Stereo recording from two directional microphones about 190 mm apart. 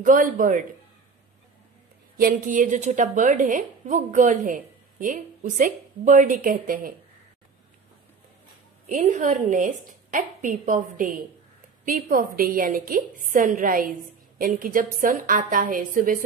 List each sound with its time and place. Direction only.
0.0 s a woman's voice: 45° right (ahead or behind)
2.1 s a woman's voice: 45° right (ahead or behind)
8.9 s a woman's voice: 40° right (ahead or behind)